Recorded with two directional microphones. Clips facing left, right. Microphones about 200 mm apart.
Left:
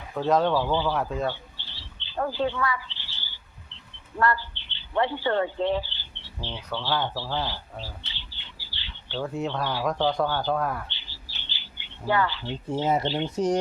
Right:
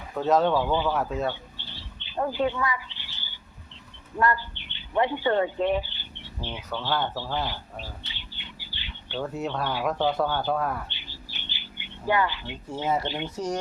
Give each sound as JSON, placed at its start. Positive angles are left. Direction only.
{"t": 0.2, "sound": "speech", "side_deg": -5}
{"t": 0.6, "sound": "speech", "side_deg": -15}
{"t": 0.9, "sound": "speech", "side_deg": -5}
{"t": 1.3, "sound": "a sound", "side_deg": -15}
{"t": 4.2, "sound": "speech", "side_deg": -15}
{"t": 7.2, "sound": "bird", "side_deg": -15}
{"t": 9.2, "sound": "speech", "side_deg": -5}
{"t": 10.8, "sound": "bird", "side_deg": -15}
{"t": 12.6, "sound": "speech", "side_deg": 20}